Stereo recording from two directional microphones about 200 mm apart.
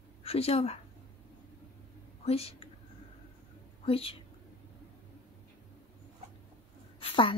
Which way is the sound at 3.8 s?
30° left (ahead or behind).